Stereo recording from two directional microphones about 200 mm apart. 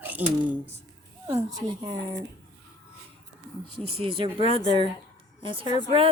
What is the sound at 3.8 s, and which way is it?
Speech, 30° right (ahead or behind).